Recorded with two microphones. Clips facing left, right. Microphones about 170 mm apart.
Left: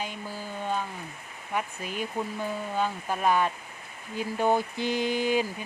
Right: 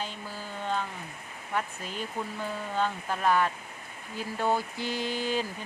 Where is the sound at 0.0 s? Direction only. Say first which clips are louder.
Left 2 dB; 15° left (ahead or behind).